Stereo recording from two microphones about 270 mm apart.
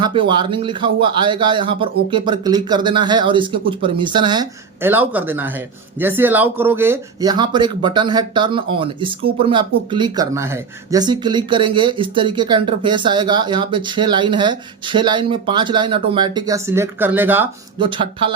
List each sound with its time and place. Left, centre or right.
0.0 s speech: centre
17.7 s speech: centre